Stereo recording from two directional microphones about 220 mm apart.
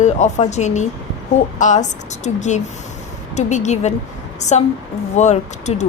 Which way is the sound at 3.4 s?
30° left (ahead or behind).